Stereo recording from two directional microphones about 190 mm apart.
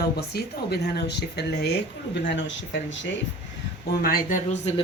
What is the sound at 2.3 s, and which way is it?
Speech, 75° left (ahead or behind).